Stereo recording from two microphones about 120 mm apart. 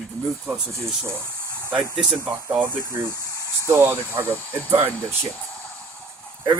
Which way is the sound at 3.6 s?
20° right (ahead or behind).